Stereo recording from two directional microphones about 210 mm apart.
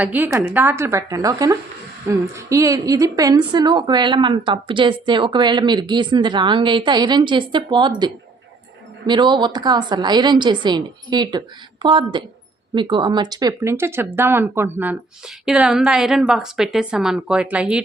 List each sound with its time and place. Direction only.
0.0 s a woman's voice: 10° right (ahead or behind)